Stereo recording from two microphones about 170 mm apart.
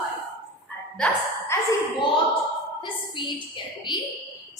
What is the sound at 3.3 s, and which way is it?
Speech, 30° left (ahead or behind).